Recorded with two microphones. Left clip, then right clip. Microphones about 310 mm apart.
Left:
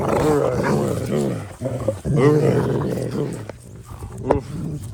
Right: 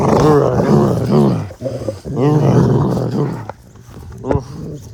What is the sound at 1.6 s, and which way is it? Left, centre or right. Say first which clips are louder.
Roaring cats: right 1 dB; left.